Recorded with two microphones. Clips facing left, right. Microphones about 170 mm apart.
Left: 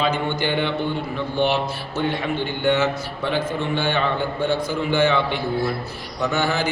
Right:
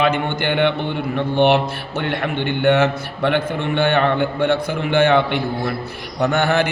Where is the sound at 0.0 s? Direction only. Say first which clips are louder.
Right 3 dB; 60° right (ahead or behind).